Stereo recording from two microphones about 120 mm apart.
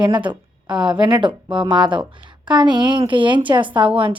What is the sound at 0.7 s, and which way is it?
Speech, 5° right (ahead or behind).